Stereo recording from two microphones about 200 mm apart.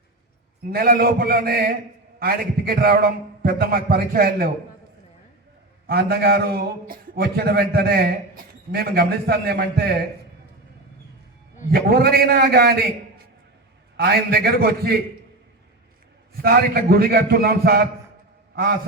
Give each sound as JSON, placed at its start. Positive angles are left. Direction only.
{"t": 0.7, "sound": "a man's voice", "side_deg": -50}
{"t": 5.9, "sound": "a man's voice", "side_deg": -50}
{"t": 11.7, "sound": "a man's voice", "side_deg": -50}
{"t": 13.9, "sound": "a man's voice", "side_deg": -50}
{"t": 16.4, "sound": "a man's voice", "side_deg": -50}